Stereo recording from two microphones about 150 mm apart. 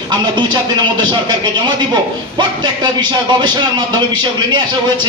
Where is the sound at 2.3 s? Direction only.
30° right (ahead or behind).